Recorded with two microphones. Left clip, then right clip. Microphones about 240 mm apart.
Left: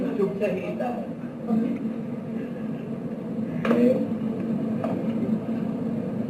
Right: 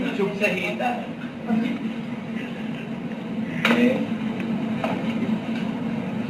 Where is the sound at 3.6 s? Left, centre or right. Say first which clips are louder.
Right 1 dB; centre.